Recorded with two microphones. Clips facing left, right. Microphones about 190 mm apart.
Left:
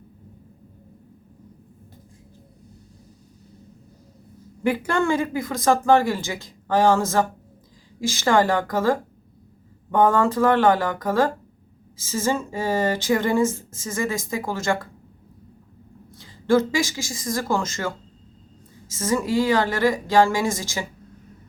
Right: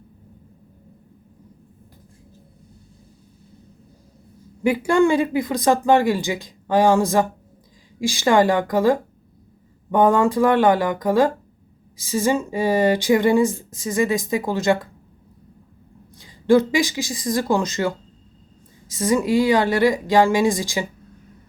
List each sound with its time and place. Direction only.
4.6 s speech: 10° right (ahead or behind)
16.1 s speech: 15° right (ahead or behind)